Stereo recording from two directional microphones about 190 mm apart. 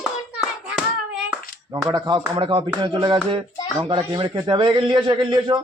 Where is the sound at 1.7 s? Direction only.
20° right (ahead or behind).